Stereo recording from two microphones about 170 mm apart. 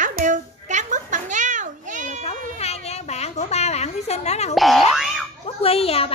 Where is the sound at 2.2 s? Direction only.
40° left (ahead or behind).